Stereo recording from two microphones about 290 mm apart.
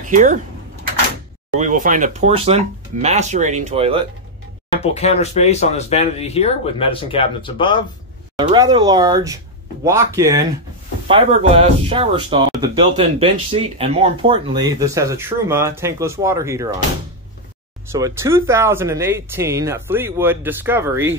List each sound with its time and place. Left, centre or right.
0.1 s speech: right
1.6 s speech: right
4.9 s speech: left
8.4 s speech: centre
17.9 s speech: centre